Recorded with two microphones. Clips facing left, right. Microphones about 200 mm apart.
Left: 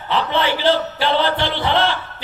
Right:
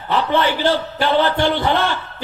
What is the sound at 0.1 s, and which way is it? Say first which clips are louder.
A man's voice: right 2 dB; 50° right (ahead or behind).